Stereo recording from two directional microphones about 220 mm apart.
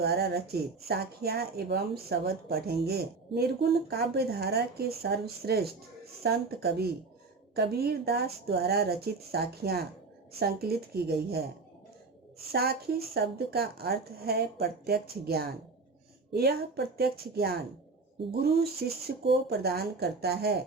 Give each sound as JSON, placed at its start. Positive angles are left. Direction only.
{"t": 0.0, "sound": "speech", "side_deg": -45}
{"t": 12.5, "sound": "speech", "side_deg": -45}